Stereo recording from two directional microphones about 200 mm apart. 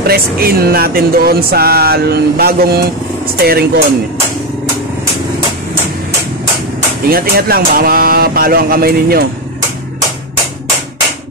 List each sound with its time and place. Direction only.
0.0 s speech: 50° right (ahead or behind)
7.1 s speech: 50° right (ahead or behind)